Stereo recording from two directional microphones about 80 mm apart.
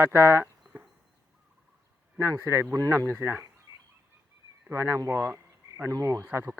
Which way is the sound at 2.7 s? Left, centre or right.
Right.